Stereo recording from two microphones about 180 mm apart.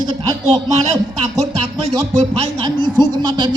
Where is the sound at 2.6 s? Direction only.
25° right (ahead or behind).